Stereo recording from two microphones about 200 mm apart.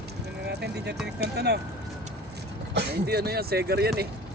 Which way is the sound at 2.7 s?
55° right (ahead or behind).